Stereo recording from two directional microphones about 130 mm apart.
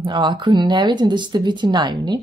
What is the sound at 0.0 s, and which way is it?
Speech, 35° right (ahead or behind).